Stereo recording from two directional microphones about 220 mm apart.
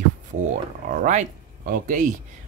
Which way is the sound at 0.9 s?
35° right (ahead or behind).